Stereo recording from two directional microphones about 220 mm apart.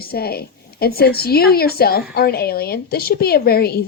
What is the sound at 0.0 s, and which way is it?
A woman's voice, 45° left (ahead or behind).